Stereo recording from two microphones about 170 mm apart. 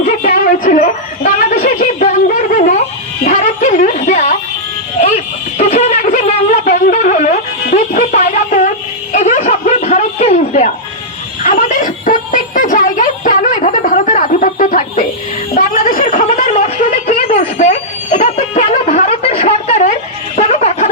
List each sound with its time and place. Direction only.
0.2 s music: 50° left (ahead or behind)
1.6 s snicker: 45° left (ahead or behind)
3.2 s music: 45° left (ahead or behind)
4.9 s a sound: 45° left (ahead or behind)
6.7 s music: 55° left (ahead or behind)
9.1 s a sound: 45° left (ahead or behind)